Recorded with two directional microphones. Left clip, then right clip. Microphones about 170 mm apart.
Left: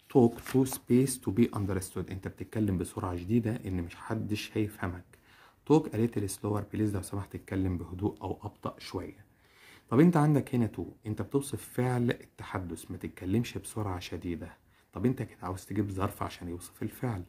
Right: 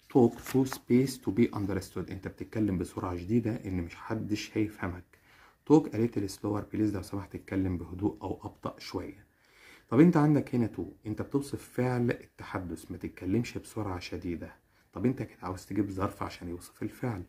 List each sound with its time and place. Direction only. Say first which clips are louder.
0.1 s speech: even; 30° left (ahead or behind)